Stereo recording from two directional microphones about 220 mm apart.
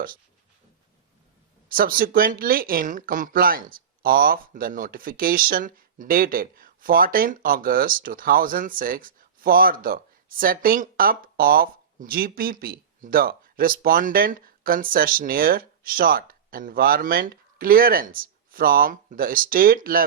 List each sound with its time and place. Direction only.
1.7 s speech: 40° right (ahead or behind)